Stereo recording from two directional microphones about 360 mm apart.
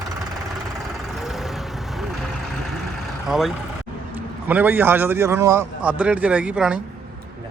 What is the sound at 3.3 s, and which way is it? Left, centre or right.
A man's voice, centre.